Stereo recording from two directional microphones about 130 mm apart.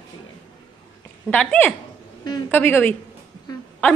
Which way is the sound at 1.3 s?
10° left (ahead or behind).